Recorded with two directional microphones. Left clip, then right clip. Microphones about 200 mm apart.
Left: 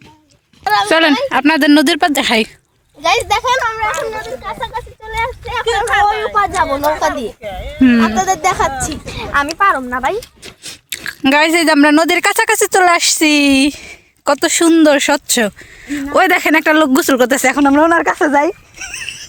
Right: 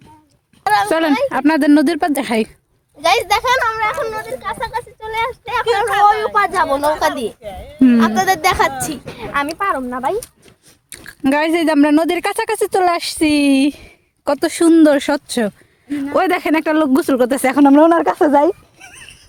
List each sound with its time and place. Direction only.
0.6 s a sound: 50° left (ahead or behind)
0.9 s speech: centre (ahead or behind)
6.2 s speech: 15° right (ahead or behind)
7.4 s speech: 30° left (ahead or behind)
7.8 s speech: centre (ahead or behind)
9.0 s speech: 15° left (ahead or behind); by 17.5 s centre (ahead or behind)
17.5 s speech: 20° right (ahead or behind)
17.8 s speech: centre (ahead or behind)
18.4 s a sound: 25° right (ahead or behind)